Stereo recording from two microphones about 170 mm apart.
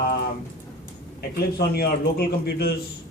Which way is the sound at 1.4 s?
70° left (ahead or behind).